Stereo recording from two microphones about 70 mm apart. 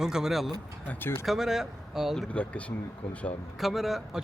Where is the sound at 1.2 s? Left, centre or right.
Centre.